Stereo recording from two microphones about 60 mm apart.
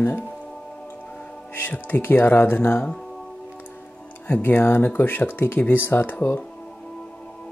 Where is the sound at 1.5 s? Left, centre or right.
Left.